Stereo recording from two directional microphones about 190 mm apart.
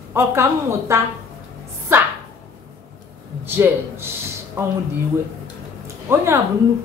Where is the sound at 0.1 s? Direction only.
15° right (ahead or behind).